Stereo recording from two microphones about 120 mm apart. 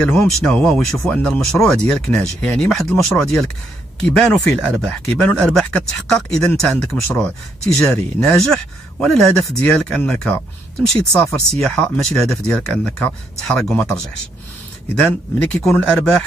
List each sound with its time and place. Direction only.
0.0 s speech: 5° left (ahead or behind)
15.3 s speech: 10° left (ahead or behind)